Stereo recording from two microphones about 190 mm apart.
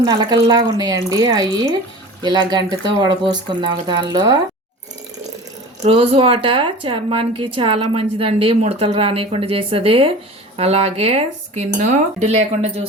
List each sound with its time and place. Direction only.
0.0 s a woman's voice: 20° right (ahead or behind)
5.8 s a woman's voice: 30° right (ahead or behind)